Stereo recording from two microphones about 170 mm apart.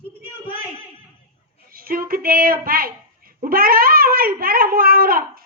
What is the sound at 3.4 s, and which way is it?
A child's voice, 60° right (ahead or behind).